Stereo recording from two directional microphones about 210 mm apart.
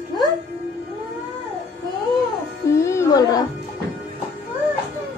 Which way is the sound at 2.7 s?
15° left (ahead or behind).